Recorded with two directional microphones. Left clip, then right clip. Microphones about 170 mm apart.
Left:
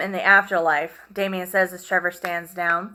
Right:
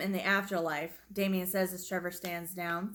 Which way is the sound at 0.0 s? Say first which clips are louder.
Left 14 dB; 45° right (ahead or behind).